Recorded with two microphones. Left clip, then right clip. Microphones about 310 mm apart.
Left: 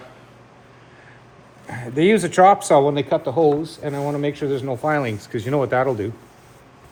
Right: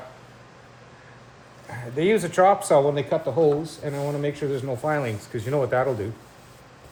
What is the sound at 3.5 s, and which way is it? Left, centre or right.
Speech, centre.